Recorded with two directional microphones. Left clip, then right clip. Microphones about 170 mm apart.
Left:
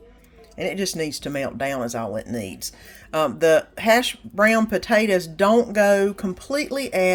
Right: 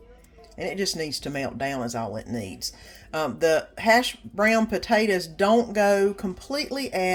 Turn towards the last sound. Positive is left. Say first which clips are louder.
# left 5 dB
turn(degrees=35)  # may be behind; listen again after turning